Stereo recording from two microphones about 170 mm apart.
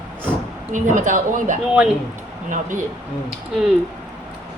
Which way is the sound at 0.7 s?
50° right (ahead or behind).